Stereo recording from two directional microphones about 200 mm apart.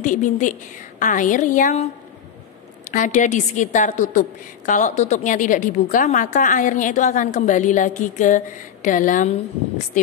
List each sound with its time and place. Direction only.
0.0 s a woman's voice: 40° left (ahead or behind)
2.9 s a woman's voice: 40° left (ahead or behind)